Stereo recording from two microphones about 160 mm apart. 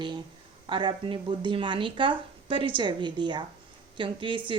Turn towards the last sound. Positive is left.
turn(degrees=-30)  # may be behind; listen again after turning